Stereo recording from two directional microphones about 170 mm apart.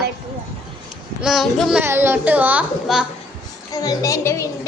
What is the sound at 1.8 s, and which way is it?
A woman's voice, 15° right (ahead or behind).